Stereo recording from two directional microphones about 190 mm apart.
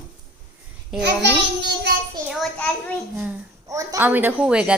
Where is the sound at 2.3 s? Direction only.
5° left (ahead or behind).